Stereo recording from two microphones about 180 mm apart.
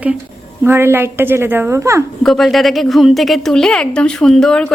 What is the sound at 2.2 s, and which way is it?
A woman's voice, centre (ahead or behind).